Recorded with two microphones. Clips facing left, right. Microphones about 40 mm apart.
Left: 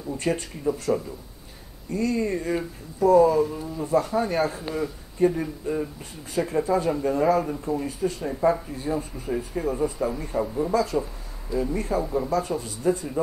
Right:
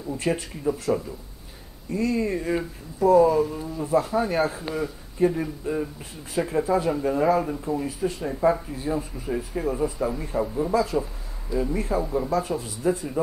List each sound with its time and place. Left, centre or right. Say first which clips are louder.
0.1 s speech: even; centre